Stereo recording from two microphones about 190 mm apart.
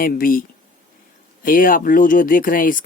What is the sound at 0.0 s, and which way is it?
Speech, 50° left (ahead or behind).